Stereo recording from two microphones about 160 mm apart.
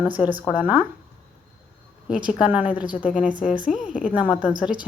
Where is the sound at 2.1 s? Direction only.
5° right (ahead or behind).